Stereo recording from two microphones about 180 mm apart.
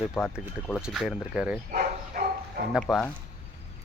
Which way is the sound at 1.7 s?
50° right (ahead or behind).